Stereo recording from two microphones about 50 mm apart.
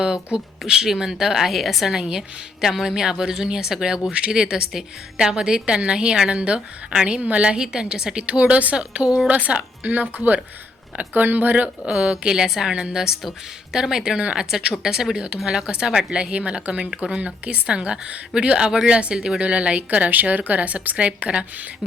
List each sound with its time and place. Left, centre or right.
0.0 s a woman's voice: centre; by 11.7 s right
11.9 s a woman's voice: right